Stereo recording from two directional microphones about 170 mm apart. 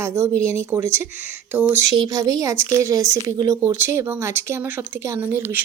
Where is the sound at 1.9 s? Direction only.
25° right (ahead or behind).